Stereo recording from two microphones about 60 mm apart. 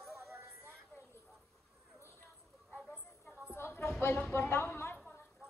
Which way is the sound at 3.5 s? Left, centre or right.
Left.